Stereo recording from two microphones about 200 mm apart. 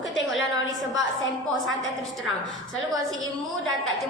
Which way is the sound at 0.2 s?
Centre (ahead or behind).